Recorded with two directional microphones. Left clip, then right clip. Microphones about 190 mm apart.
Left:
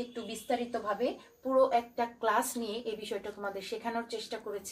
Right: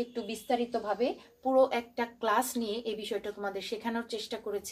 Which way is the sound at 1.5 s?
30° right (ahead or behind).